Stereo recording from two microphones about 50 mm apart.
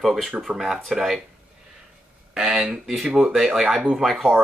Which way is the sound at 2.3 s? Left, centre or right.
Centre.